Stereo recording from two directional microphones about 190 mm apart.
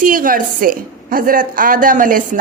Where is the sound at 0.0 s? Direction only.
45° right (ahead or behind).